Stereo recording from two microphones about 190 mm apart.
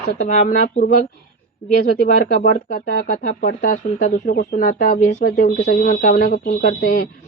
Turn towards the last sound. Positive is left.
turn(degrees=50)  # may be behind; listen again after turning